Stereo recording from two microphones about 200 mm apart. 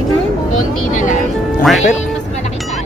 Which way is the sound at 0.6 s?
40° left (ahead or behind).